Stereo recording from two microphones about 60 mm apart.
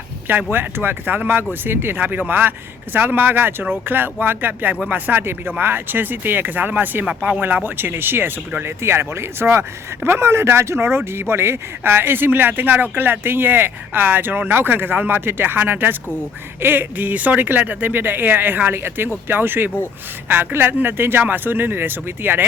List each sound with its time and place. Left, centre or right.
0.5 s speech: right
7.0 s speech: centre
7.4 s speech: right